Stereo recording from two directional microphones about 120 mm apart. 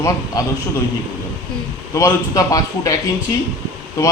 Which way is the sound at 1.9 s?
25° left (ahead or behind).